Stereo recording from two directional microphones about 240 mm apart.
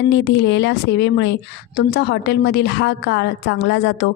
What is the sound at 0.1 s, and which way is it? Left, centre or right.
A woman's voice, left.